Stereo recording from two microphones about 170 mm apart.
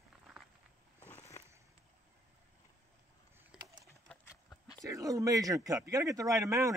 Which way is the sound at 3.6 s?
25° right (ahead or behind).